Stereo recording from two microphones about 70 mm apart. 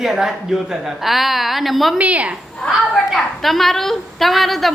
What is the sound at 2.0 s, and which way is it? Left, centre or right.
Speech, centre.